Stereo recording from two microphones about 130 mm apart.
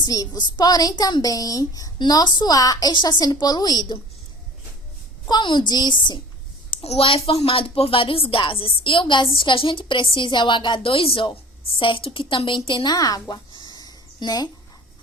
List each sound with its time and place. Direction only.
0.0 s a woman's voice: 30° left (ahead or behind)
5.3 s a woman's voice: 35° left (ahead or behind)
6.8 s a woman's voice: 50° left (ahead or behind); by 14.5 s 30° left (ahead or behind)